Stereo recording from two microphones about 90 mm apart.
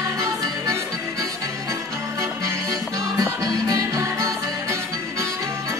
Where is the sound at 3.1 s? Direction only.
45° right (ahead or behind).